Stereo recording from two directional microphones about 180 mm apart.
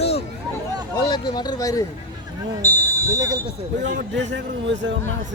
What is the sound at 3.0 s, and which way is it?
Speech, 20° right (ahead or behind).